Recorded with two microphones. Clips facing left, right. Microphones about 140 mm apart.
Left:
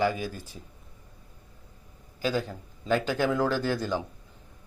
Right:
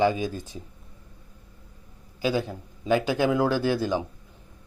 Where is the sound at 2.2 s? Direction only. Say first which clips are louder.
Right 3 dB; 15° right (ahead or behind).